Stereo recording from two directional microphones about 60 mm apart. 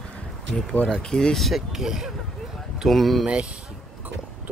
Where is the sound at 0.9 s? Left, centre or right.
Centre.